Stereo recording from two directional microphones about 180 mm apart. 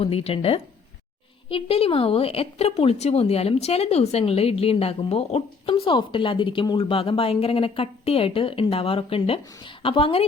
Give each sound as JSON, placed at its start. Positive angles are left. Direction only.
{"t": 0.0, "sound": "a woman's voice", "side_deg": 35}